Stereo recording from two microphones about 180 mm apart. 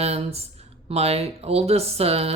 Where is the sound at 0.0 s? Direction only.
35° right (ahead or behind).